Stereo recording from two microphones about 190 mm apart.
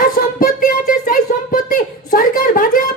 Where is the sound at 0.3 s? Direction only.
45° left (ahead or behind).